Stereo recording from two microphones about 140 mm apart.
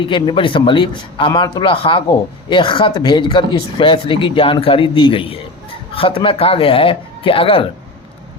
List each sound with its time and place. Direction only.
0.0 s speech: 35° left (ahead or behind)